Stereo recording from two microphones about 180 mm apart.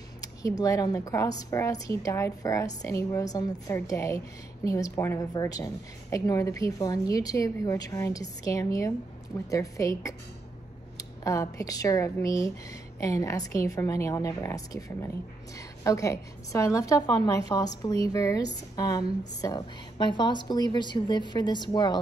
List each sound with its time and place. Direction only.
0.2 s a woman's voice: 20° left (ahead or behind)